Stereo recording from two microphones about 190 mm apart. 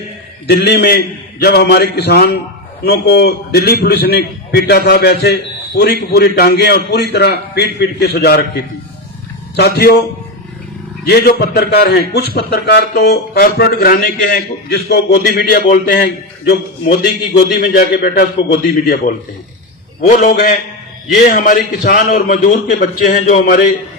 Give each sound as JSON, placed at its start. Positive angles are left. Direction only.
{"t": 0.4, "sound": "a man's voice", "side_deg": 60}
{"t": 11.0, "sound": "a man's voice", "side_deg": 55}
{"t": 20.0, "sound": "a man's voice", "side_deg": 45}